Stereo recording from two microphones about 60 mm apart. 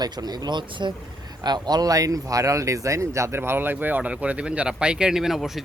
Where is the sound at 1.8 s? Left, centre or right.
Right.